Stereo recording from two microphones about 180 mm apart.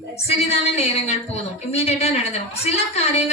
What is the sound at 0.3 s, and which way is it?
A woman's voice, 35° left (ahead or behind).